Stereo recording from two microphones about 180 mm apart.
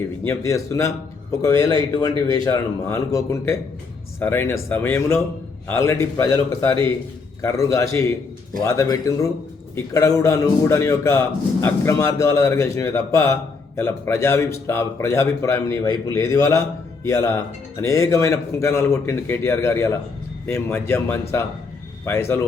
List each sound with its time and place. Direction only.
0.3 s a man's voice: 15° left (ahead or behind)